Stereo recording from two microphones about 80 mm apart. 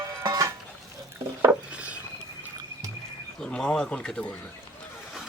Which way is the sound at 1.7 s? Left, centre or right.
Centre.